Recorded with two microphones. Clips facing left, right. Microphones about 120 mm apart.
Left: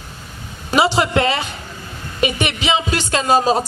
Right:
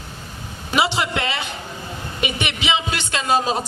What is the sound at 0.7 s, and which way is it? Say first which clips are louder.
A man's voice: left 5 dB; 40° left (ahead or behind).